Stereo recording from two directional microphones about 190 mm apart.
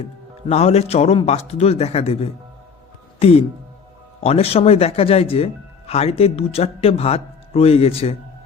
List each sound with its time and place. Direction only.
0.4 s speech: 35° left (ahead or behind)